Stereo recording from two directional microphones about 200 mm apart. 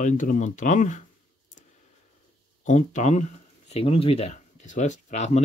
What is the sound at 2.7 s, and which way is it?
Speech, 35° left (ahead or behind).